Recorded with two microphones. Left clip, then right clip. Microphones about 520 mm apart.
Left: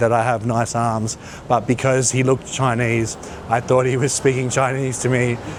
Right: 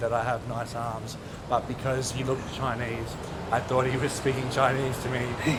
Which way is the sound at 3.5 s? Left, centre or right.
Left.